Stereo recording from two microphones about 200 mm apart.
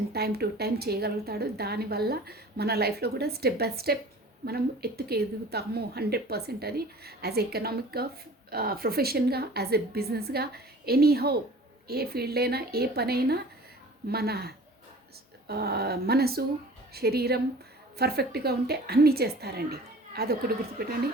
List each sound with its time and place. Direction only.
0.1 s a woman's voice: 50° right (ahead or behind)